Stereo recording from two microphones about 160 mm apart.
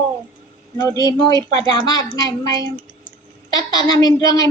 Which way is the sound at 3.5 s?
25° left (ahead or behind).